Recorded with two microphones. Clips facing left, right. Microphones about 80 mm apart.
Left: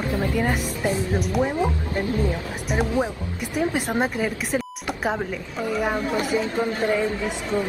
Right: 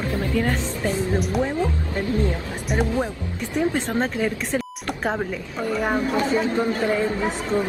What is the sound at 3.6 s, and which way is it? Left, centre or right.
Speech, centre.